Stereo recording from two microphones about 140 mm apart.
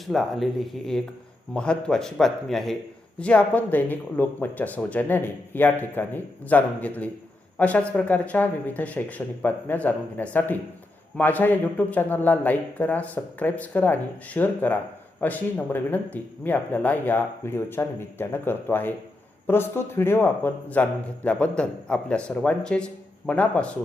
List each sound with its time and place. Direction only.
0.0 s a man's voice: centre (ahead or behind)